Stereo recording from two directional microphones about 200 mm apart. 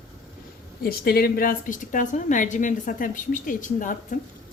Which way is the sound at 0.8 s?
50° left (ahead or behind).